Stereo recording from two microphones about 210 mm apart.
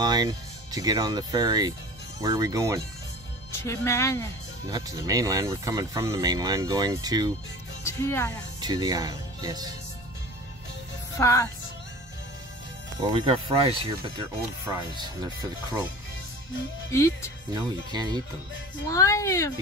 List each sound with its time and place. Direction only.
0.0 s speech: 20° right (ahead or behind)
3.6 s speech: 15° left (ahead or behind)
4.6 s speech: 15° right (ahead or behind)
7.8 s speech: 15° left (ahead or behind)
8.5 s speech: 20° right (ahead or behind)
11.1 s speech: 15° left (ahead or behind)
13.1 s speech: 25° right (ahead or behind)
16.9 s speech: 15° left (ahead or behind)
17.9 s speech: 20° right (ahead or behind)
18.9 s speech: 15° left (ahead or behind)